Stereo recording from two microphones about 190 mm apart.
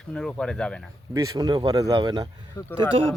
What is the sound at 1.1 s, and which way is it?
Speech, 20° right (ahead or behind).